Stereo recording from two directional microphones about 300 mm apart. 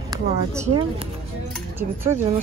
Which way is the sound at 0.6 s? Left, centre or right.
Centre.